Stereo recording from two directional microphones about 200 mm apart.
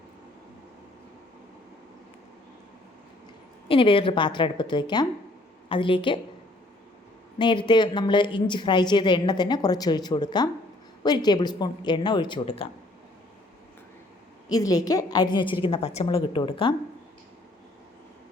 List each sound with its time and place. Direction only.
3.7 s a woman's voice: 25° left (ahead or behind)
7.3 s a woman's voice: 20° left (ahead or behind)
14.8 s a woman's voice: 20° left (ahead or behind)